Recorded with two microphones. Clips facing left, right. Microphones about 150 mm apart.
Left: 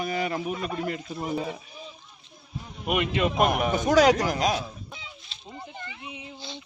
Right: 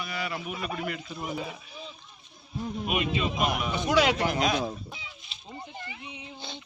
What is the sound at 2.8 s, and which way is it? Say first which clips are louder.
A man's voice: left 5 dB; 65° left (ahead or behind).